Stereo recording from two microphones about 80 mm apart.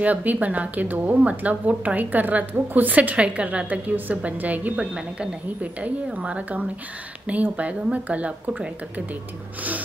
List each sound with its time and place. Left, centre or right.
0.0 s speech: centre